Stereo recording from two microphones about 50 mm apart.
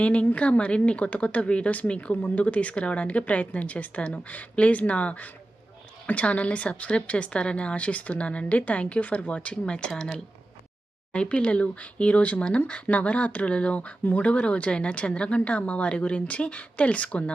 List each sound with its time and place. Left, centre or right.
0.0 s a woman's voice: left
14.0 s speech: left
14.3 s a woman's voice: left